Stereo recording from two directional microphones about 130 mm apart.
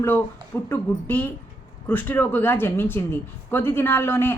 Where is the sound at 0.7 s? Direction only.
15° left (ahead or behind).